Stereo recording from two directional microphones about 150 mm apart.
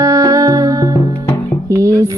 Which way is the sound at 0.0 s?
20° right (ahead or behind).